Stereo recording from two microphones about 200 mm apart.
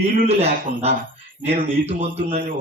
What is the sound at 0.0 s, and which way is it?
Speech, 30° right (ahead or behind).